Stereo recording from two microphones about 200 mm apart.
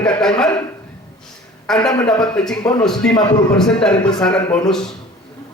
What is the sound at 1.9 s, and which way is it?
A man's voice, 5° left (ahead or behind).